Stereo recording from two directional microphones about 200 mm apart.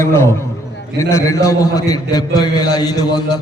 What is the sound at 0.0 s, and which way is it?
A man's voice, 15° left (ahead or behind).